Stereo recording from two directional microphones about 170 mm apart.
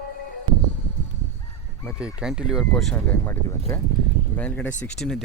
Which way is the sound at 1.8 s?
5° right (ahead or behind).